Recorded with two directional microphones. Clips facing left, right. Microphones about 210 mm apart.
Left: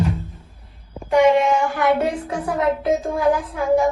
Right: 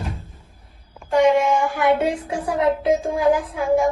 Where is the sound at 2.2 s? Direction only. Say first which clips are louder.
Right 1 dB; 30° right (ahead or behind).